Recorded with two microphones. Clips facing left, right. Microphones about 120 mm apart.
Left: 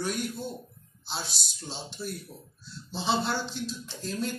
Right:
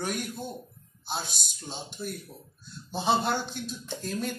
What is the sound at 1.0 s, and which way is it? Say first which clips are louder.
Speech: right 2 dB; 50° right (ahead or behind).